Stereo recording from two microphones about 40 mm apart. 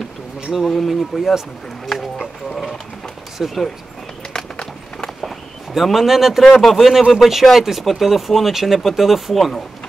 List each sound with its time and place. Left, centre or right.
0.7 s speech: centre
3.3 s speech: centre
4.3 s clip-clop: centre
5.8 s speech: centre